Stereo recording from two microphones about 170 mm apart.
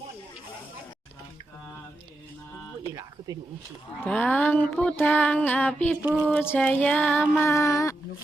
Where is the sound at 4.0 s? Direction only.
5° left (ahead or behind).